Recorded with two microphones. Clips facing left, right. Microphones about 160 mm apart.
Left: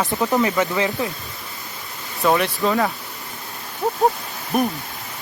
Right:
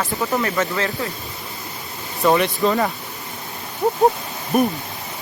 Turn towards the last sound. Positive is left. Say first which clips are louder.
# right 2 dB
turn(degrees=0)  # may be behind; listen again after turning